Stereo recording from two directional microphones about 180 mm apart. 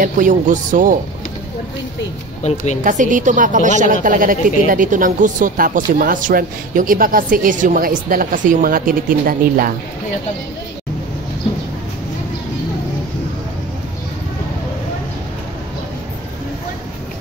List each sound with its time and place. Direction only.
0.0 s a woman's voice: 45° right (ahead or behind)
2.8 s a woman's voice: 45° right (ahead or behind)